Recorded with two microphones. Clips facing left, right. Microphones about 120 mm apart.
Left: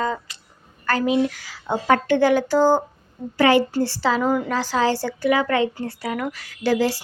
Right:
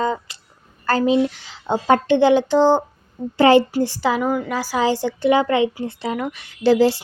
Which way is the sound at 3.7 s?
15° right (ahead or behind).